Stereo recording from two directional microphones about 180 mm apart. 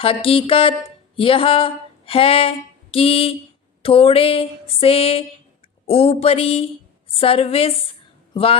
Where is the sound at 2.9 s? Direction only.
30° left (ahead or behind).